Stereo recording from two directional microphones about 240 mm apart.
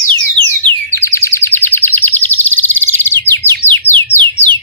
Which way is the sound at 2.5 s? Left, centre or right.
Right.